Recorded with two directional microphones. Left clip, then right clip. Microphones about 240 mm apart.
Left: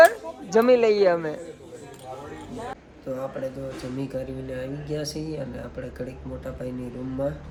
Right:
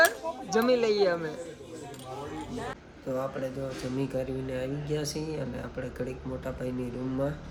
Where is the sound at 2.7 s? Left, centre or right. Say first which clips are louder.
Left 1 dB; centre.